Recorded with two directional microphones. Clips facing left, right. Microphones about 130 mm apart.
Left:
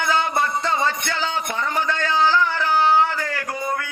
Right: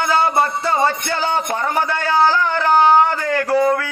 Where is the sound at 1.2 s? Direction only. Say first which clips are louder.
Right 6 dB; 50° right (ahead or behind).